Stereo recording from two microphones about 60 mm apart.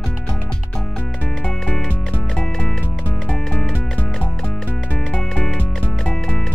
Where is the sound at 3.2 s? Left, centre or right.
Centre.